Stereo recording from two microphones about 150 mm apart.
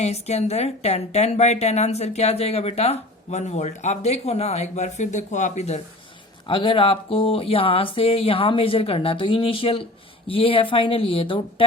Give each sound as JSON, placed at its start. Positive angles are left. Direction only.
{"t": 0.0, "sound": "a woman's voice", "side_deg": 45}
{"t": 6.5, "sound": "speech", "side_deg": 35}